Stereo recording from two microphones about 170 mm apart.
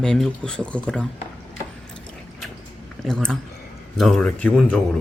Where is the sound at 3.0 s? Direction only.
5° left (ahead or behind).